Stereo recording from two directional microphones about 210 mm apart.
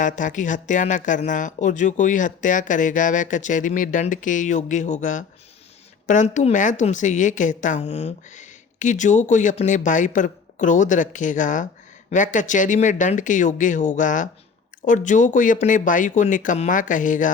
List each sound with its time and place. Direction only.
0.0 s a woman's voice: 35° left (ahead or behind)